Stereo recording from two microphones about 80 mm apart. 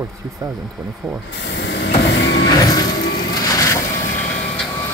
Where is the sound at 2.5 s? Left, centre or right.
Left.